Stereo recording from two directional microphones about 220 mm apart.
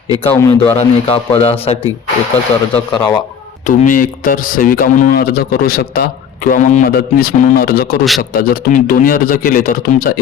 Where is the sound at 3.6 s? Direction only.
35° left (ahead or behind).